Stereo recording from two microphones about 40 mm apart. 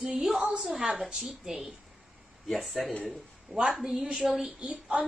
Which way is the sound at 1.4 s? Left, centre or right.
Centre.